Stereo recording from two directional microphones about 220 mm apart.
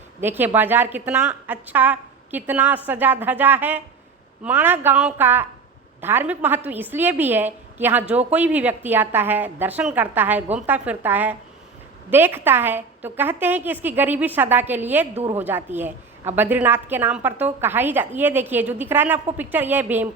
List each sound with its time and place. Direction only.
0.2 s a woman's voice: 10° right (ahead or behind)
15.1 s a woman's voice: 30° right (ahead or behind)
15.4 s a woman's voice: 10° right (ahead or behind)